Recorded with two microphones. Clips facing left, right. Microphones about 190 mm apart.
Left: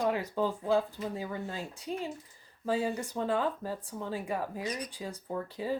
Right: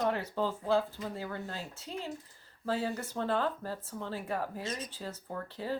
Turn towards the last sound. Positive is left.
turn(degrees=15)  # may be behind; listen again after turning